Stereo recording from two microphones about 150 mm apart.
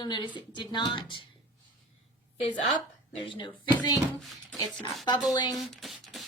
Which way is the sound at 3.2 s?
30° left (ahead or behind).